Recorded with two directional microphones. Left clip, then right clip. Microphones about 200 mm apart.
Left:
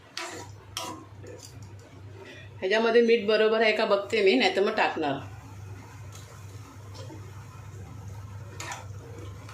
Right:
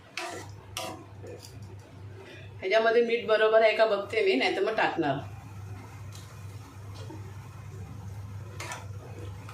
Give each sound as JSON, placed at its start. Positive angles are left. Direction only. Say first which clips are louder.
{"t": 2.6, "sound": "speech", "louder": "left 1 dB", "side_deg": 40}